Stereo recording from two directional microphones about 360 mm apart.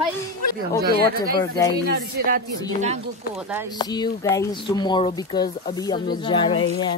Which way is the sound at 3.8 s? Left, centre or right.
Centre.